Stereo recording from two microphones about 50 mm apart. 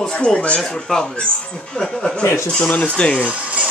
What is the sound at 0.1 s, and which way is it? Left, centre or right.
Speech, centre.